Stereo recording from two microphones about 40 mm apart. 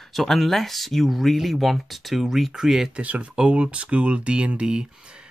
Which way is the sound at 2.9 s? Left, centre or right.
Right.